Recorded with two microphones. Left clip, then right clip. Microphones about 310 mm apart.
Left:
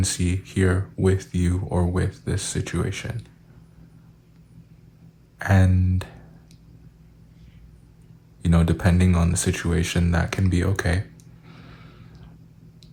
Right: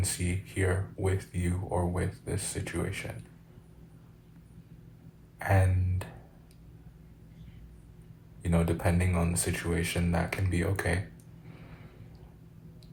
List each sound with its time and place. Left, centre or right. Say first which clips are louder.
0.0 s speech: left 8 dB; left
5.4 s speech: left 5 dB; left
8.4 s speech: left 6 dB; left